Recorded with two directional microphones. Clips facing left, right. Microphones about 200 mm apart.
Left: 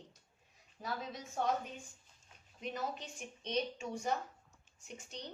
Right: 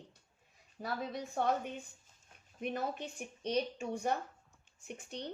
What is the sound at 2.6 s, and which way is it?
A woman's voice, 55° right (ahead or behind).